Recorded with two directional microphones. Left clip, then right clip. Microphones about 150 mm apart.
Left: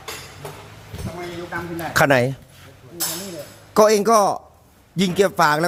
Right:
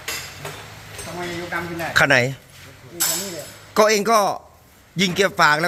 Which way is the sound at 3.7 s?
35° left (ahead or behind).